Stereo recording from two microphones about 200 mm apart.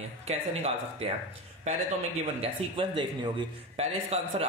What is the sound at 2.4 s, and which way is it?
A man's voice, 25° right (ahead or behind).